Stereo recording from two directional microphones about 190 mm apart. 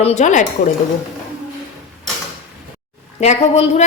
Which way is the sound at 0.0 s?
40° left (ahead or behind).